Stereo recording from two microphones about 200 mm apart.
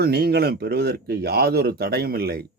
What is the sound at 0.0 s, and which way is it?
Speech, 50° right (ahead or behind).